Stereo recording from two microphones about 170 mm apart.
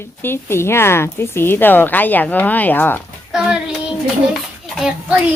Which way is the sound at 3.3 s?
5° right (ahead or behind).